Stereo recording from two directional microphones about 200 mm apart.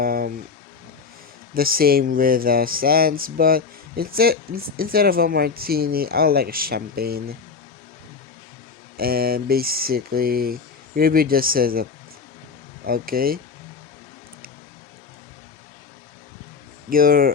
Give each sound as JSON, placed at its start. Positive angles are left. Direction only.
{"t": 0.0, "sound": "a sound", "side_deg": -50}
{"t": 1.5, "sound": "speech", "side_deg": -45}
{"t": 9.0, "sound": "speech", "side_deg": -50}
{"t": 16.9, "sound": "speech", "side_deg": -45}